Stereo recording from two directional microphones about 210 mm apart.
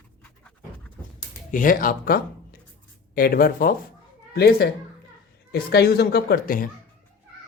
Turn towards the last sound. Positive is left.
turn(degrees=45)  # may be behind; listen again after turning